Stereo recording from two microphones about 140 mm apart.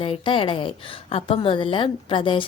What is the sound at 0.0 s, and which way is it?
Speech, 40° left (ahead or behind).